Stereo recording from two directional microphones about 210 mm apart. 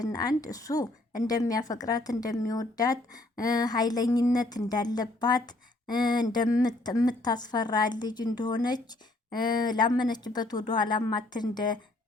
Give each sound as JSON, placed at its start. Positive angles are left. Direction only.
{"t": 0.0, "sound": "a woman's voice", "side_deg": 20}